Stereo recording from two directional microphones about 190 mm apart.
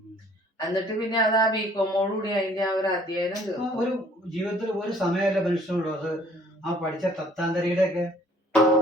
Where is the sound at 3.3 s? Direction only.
Centre (ahead or behind).